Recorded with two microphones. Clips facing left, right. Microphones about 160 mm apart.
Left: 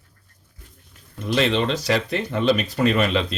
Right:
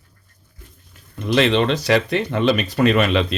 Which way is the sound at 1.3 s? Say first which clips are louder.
Right 4 dB; 75° right (ahead or behind).